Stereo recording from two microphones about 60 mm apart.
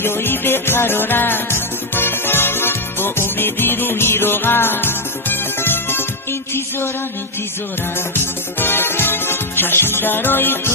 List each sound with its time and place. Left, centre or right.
0.0 s music: left
8.1 s music: left